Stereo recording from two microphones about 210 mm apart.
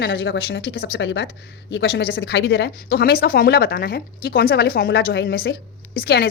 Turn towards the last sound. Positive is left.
turn(degrees=50)  # may be behind; listen again after turning